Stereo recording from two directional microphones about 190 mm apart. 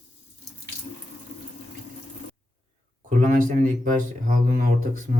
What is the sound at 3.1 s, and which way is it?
Speech, 45° right (ahead or behind).